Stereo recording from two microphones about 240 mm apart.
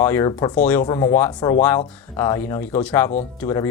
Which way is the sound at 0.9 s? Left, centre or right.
Centre.